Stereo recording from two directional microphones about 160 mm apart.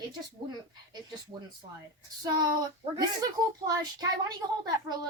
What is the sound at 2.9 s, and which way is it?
Speech, 20° right (ahead or behind).